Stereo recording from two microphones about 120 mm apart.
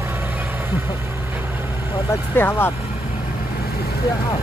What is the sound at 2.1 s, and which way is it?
Vehicle, 20° left (ahead or behind).